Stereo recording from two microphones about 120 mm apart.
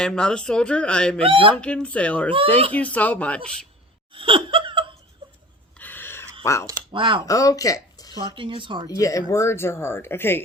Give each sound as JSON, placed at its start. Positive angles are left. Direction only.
{"t": 0.0, "sound": "speech", "side_deg": 5}
{"t": 1.2, "sound": "speech", "side_deg": -45}
{"t": 1.5, "sound": "speech", "side_deg": 10}
{"t": 4.1, "sound": "laughter", "side_deg": -45}
{"t": 5.7, "sound": "a sound", "side_deg": 15}
{"t": 6.4, "sound": "speech", "side_deg": 25}
{"t": 6.9, "sound": "speech", "side_deg": -45}
{"t": 7.3, "sound": "speech", "side_deg": 30}
{"t": 8.4, "sound": "speech", "side_deg": -45}
{"t": 8.9, "sound": "speech", "side_deg": 30}